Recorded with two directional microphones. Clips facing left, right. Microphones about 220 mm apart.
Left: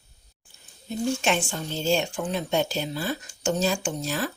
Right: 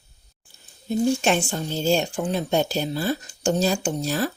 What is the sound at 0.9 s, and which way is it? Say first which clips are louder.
A woman's voice: right 5 dB; 40° right (ahead or behind).